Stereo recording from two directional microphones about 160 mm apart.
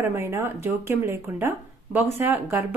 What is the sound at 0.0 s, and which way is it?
A woman's voice, 15° right (ahead or behind).